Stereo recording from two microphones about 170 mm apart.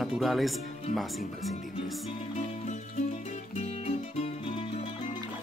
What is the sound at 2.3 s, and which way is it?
Music, 40° left (ahead or behind).